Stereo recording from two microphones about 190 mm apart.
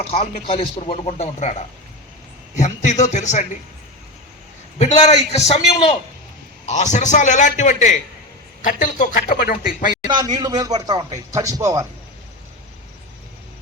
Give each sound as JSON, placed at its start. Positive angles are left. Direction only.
{"t": 0.1, "sound": "a man's voice", "side_deg": 30}
{"t": 2.6, "sound": "a man's voice", "side_deg": 40}
{"t": 4.8, "sound": "a man's voice", "side_deg": 35}
{"t": 10.1, "sound": "speech", "side_deg": -20}